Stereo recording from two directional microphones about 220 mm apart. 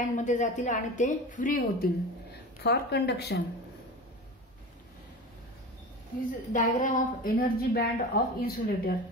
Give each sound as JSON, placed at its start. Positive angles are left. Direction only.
{"t": 0.0, "sound": "a woman's voice", "side_deg": 35}
{"t": 2.6, "sound": "speech", "side_deg": 50}
{"t": 6.5, "sound": "a woman's voice", "side_deg": 35}